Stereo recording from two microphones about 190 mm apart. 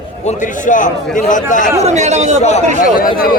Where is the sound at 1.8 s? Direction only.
35° right (ahead or behind).